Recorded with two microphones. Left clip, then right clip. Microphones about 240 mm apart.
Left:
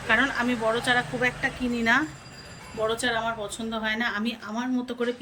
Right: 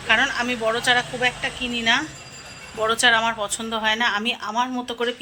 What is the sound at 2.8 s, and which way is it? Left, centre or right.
Speech, centre.